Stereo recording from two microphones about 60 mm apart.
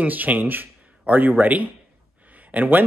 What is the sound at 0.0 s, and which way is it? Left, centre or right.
Speech, right.